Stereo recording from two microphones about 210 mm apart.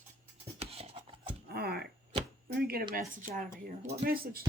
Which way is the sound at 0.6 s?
30° right (ahead or behind).